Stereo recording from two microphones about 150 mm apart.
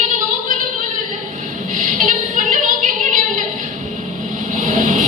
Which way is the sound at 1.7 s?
65° right (ahead or behind).